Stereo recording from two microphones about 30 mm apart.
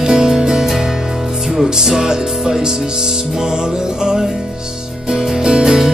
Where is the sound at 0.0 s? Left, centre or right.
Centre.